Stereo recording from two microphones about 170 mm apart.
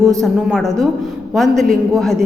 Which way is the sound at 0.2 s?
Centre (ahead or behind).